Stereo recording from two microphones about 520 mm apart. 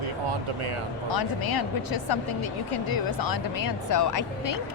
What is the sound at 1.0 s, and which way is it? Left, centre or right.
A woman's voice, left.